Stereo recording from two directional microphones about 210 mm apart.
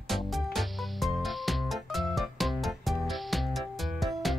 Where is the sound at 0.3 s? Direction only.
Centre (ahead or behind).